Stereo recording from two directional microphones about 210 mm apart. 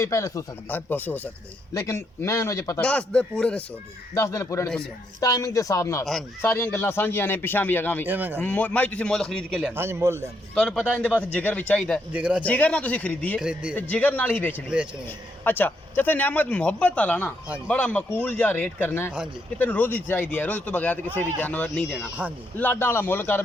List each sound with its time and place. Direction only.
0.0 s a man's voice: 15° left (ahead or behind)
8.0 s speech: 10° right (ahead or behind)
8.4 s a man's voice: 5° left (ahead or behind)
9.7 s speech: 10° right (ahead or behind)
10.5 s a man's voice: 5° left (ahead or behind)
12.1 s speech: 5° right (ahead or behind)
12.4 s a man's voice: 5° left (ahead or behind)
13.4 s a man's voice: 5° right (ahead or behind)
13.7 s a man's voice: 10° left (ahead or behind)